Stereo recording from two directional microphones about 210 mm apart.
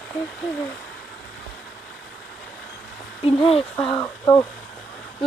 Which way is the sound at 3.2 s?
25° left (ahead or behind).